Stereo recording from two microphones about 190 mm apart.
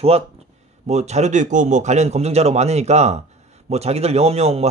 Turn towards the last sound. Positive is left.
turn(degrees=-35)  # may be behind; listen again after turning